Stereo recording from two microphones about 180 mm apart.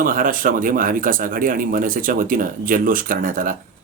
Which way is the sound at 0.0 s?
50° right (ahead or behind).